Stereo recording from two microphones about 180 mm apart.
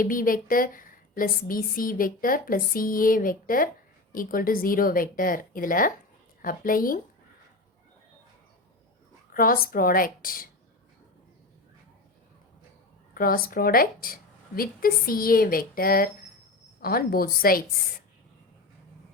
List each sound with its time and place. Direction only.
0.0 s a woman's voice: 50° left (ahead or behind)
9.3 s a woman's voice: 50° left (ahead or behind)
13.1 s a woman's voice: 55° left (ahead or behind)